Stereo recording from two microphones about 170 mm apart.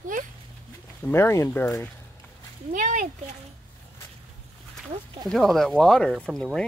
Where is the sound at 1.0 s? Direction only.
15° left (ahead or behind).